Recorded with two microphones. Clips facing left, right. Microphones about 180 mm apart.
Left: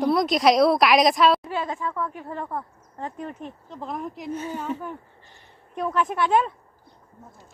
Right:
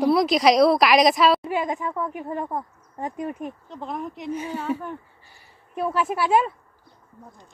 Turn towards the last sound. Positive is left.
turn(degrees=-5)  # may be behind; listen again after turning